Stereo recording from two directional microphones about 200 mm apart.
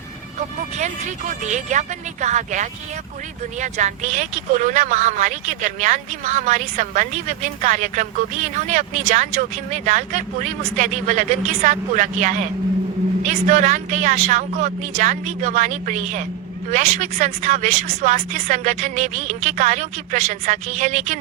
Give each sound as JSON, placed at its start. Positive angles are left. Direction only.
{"t": 0.3, "sound": "a woman's voice", "side_deg": -35}